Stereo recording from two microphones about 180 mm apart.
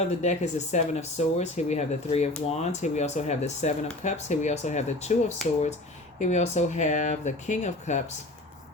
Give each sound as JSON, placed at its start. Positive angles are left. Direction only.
{"t": 0.2, "sound": "speech", "side_deg": 40}
{"t": 6.1, "sound": "speech", "side_deg": 40}